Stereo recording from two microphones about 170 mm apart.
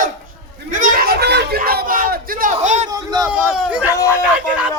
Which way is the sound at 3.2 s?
10° right (ahead or behind).